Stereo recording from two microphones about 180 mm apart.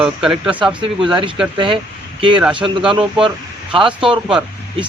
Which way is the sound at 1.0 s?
25° right (ahead or behind).